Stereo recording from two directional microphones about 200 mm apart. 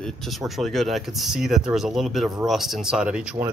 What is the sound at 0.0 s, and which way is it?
Speech, centre (ahead or behind).